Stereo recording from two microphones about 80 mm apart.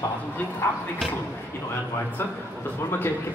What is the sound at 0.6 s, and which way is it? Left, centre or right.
Speech, left.